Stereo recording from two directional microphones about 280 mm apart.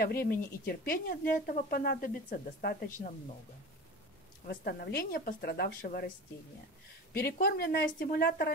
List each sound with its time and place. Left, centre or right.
0.0 s speech: left
4.5 s speech: left
7.2 s speech: left